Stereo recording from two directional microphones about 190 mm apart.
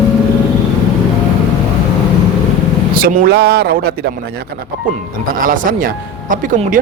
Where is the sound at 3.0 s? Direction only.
45° right (ahead or behind).